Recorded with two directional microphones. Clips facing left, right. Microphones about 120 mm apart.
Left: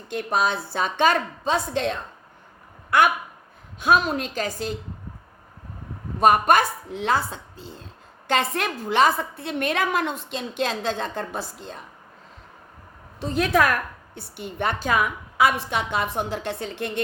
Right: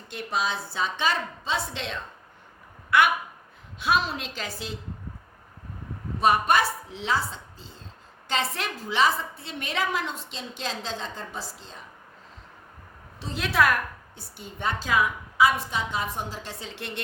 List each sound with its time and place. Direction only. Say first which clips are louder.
0.1 s a woman's voice: left 5 dB; 50° left (ahead or behind)
3.8 s a woman's voice: left 5 dB; 45° left (ahead or behind)
6.1 s a woman's voice: left 4 dB; 50° left (ahead or behind)
13.1 s a woman's voice: left 4 dB; 50° left (ahead or behind)
14.2 s a woman's voice: left 7 dB; 65° left (ahead or behind)